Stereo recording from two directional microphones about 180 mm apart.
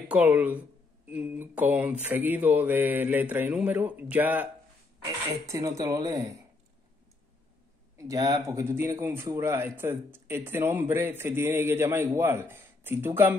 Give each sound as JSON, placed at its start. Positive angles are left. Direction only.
{"t": 0.1, "sound": "a man's voice", "side_deg": -10}
{"t": 8.0, "sound": "a man's voice", "side_deg": -20}